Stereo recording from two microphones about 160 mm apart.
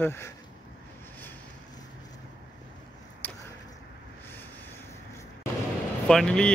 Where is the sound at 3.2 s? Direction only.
10° left (ahead or behind).